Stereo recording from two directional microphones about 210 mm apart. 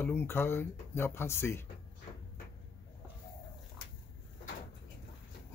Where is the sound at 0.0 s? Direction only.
10° left (ahead or behind).